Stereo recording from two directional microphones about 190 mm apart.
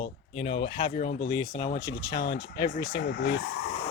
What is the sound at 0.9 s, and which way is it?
Speech, 40° left (ahead or behind).